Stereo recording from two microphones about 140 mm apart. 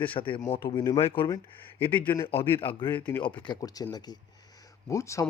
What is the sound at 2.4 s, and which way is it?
A man's voice, 40° left (ahead or behind).